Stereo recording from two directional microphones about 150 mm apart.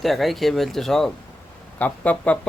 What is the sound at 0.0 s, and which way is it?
Speech, centre (ahead or behind).